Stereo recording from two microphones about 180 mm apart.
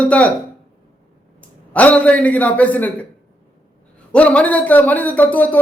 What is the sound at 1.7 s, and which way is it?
Speech, 10° left (ahead or behind).